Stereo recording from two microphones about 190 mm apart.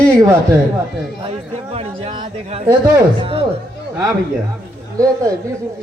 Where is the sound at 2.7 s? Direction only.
20° right (ahead or behind).